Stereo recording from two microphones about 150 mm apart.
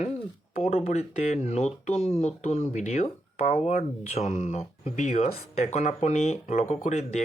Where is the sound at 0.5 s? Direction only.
45° left (ahead or behind).